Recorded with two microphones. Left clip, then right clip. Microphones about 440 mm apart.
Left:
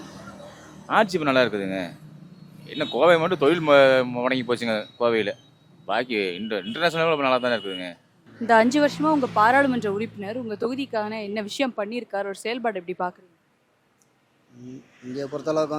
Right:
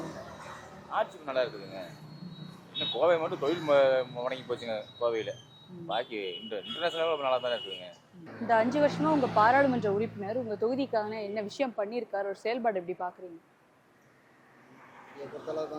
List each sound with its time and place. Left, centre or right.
0.9 s speech: left
2.7 s speech: left
8.4 s speech: centre